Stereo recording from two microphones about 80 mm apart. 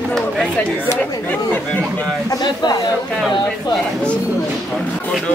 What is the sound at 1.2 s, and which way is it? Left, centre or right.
Chatter, left.